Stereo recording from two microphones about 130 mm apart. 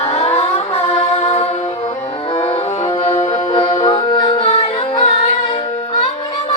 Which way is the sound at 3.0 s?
55° left (ahead or behind).